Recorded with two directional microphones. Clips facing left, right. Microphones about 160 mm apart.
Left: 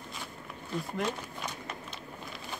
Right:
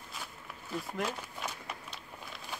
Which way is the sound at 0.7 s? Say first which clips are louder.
Left 2 dB; 5° right (ahead or behind).